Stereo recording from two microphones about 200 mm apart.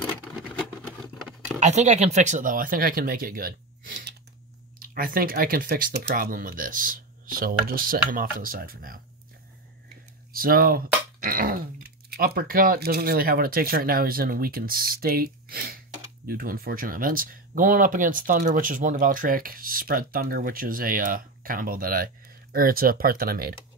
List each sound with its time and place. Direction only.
1.6 s speech: 35° right (ahead or behind)
10.3 s speech: 45° right (ahead or behind)